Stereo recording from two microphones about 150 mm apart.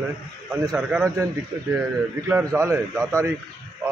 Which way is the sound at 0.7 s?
5° right (ahead or behind).